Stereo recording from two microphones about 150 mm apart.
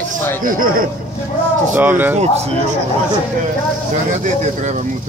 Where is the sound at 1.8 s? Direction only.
10° right (ahead or behind).